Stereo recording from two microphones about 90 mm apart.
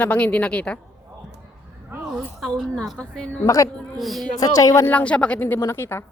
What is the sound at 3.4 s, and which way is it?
Speech, 40° left (ahead or behind).